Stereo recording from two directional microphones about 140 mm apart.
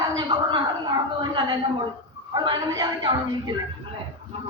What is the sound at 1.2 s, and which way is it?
A woman's voice, 35° right (ahead or behind).